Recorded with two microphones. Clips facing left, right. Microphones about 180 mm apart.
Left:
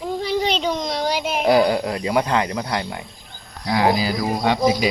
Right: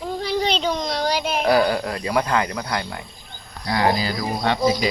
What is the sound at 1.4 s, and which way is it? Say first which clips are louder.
Speech: left 3 dB; 20° left (ahead or behind).